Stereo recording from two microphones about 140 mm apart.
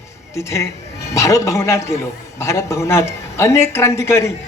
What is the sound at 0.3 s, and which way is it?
A man's voice, 20° left (ahead or behind).